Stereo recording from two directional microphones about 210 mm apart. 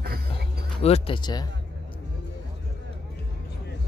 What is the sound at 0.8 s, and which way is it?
Speech, 25° left (ahead or behind).